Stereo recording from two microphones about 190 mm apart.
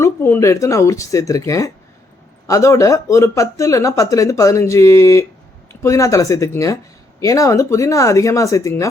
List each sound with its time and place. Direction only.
0.0 s speech: 15° left (ahead or behind)